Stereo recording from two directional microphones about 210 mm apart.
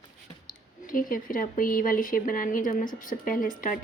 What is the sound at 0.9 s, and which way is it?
A woman's voice, 40° left (ahead or behind).